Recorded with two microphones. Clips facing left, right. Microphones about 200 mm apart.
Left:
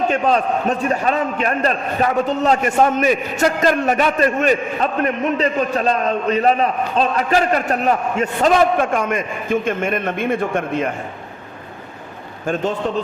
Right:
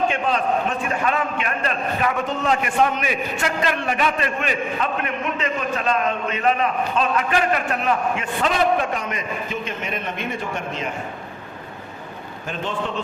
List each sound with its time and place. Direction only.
0.1 s a man's voice: 40° left (ahead or behind); by 10.8 s 55° left (ahead or behind)
12.5 s a man's voice: 50° left (ahead or behind)